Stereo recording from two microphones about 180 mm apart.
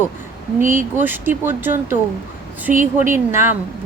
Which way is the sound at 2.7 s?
45° right (ahead or behind).